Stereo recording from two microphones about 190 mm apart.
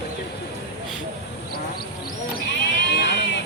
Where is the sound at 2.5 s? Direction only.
65° left (ahead or behind).